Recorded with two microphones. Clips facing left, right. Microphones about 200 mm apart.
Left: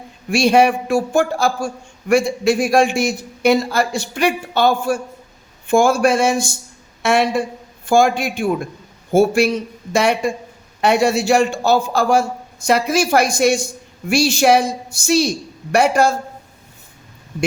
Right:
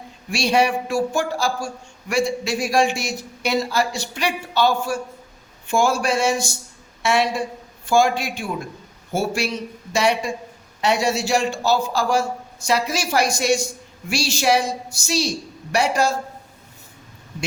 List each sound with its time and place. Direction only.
0.3 s a man's voice: 55° left (ahead or behind)